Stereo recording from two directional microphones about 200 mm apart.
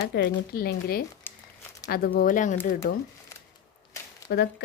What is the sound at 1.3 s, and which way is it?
Crumpling, 10° left (ahead or behind).